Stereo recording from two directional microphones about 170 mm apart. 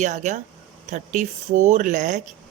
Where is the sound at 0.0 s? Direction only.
45° right (ahead or behind).